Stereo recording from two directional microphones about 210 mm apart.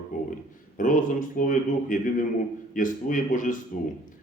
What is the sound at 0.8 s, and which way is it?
Speech, 40° left (ahead or behind).